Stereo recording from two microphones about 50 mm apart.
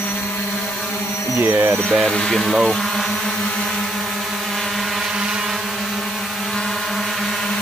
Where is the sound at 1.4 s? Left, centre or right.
Right.